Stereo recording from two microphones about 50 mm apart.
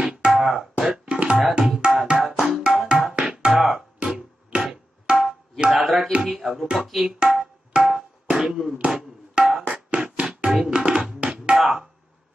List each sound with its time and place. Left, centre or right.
0.0 s music: centre
0.3 s music: centre
1.8 s tabla: centre
3.2 s music: centre
5.0 s tabla: centre
5.7 s music: centre
7.2 s tabla: centre
8.7 s music: right
11.5 s a sound: centre